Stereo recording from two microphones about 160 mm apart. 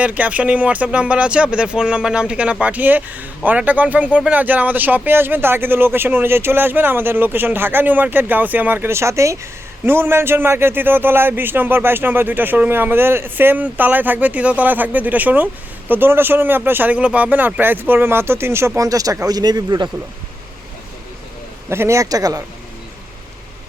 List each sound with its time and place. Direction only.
0.0 s speech: 10° right (ahead or behind); by 19.9 s 25° right (ahead or behind)
21.7 s speech: 15° right (ahead or behind)